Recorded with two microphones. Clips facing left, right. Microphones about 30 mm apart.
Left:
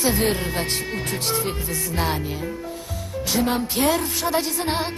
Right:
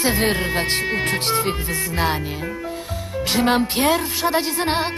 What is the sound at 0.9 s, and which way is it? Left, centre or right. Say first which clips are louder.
Music: right 5 dB; right.